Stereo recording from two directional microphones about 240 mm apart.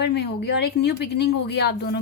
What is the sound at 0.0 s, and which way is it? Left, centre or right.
A woman's voice, left.